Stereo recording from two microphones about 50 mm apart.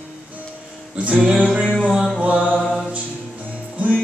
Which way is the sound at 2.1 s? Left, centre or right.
Right.